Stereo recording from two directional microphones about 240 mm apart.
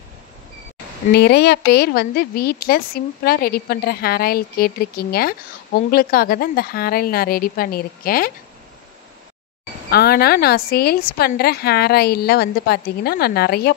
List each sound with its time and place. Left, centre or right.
1.1 s speech: left
9.8 s speech: left